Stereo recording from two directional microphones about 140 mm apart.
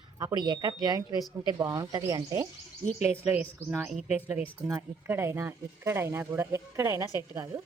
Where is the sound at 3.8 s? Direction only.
Centre (ahead or behind).